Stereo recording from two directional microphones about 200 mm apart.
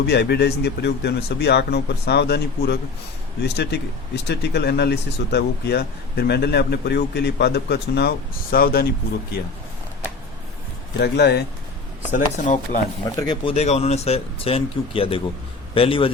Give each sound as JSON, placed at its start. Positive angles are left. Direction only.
{"t": 0.1, "sound": "speech", "side_deg": 55}
{"t": 10.9, "sound": "speech", "side_deg": 55}
{"t": 12.1, "sound": "speech", "side_deg": 40}
{"t": 13.1, "sound": "speech", "side_deg": 20}